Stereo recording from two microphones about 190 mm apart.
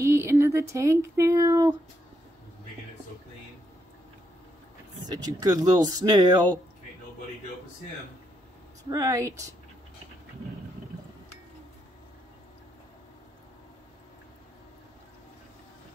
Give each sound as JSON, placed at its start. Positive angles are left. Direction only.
{"t": 0.0, "sound": "speech", "side_deg": -15}
{"t": 5.2, "sound": "speech", "side_deg": -20}
{"t": 8.9, "sound": "speech", "side_deg": -20}